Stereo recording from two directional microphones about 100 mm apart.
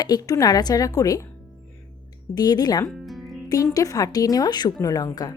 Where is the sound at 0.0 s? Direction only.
40° left (ahead or behind).